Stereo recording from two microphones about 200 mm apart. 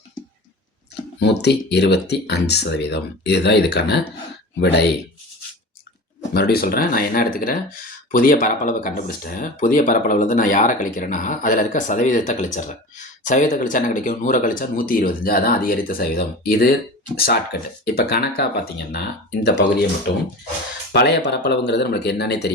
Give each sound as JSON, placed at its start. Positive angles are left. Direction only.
{"t": 1.2, "sound": "speech", "side_deg": 55}
{"t": 6.3, "sound": "speech", "side_deg": 50}
{"t": 20.9, "sound": "speech", "side_deg": 55}